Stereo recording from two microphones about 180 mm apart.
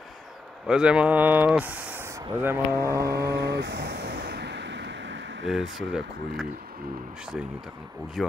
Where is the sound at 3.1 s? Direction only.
65° right (ahead or behind); by 5.4 s 90° right.